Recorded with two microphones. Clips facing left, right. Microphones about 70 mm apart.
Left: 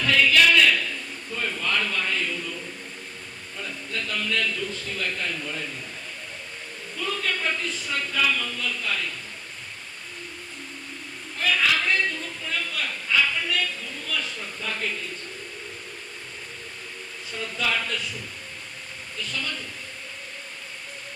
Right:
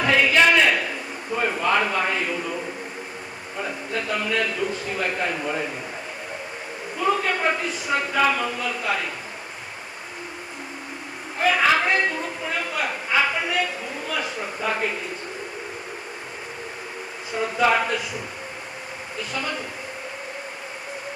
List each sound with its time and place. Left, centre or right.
0.0 s a sound: right
3.6 s a man's voice: right
7.0 s a man's voice: right
11.3 s a man's voice: right
17.3 s a man's voice: right